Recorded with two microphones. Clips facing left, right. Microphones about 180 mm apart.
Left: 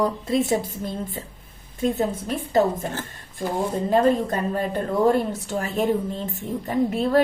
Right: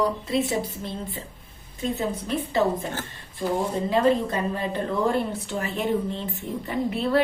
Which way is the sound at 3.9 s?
45° left (ahead or behind).